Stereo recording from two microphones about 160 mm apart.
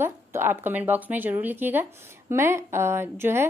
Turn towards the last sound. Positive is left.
turn(degrees=-15)  # may be behind; listen again after turning